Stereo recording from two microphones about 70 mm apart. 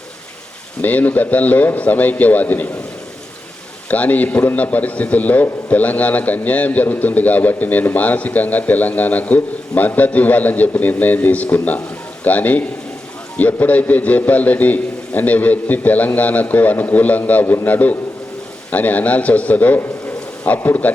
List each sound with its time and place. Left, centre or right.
0.8 s a man's voice: left
3.8 s a man's voice: left